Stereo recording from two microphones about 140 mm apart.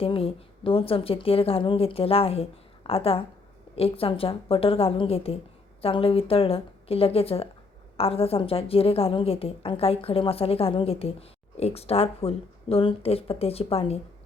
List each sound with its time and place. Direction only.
0.0 s a woman's voice: 40° left (ahead or behind)